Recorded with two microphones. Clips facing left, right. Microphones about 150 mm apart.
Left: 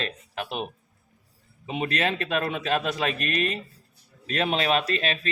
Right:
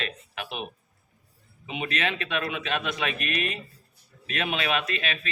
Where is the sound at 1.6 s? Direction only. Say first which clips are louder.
Left 3 dB; 40° left (ahead or behind).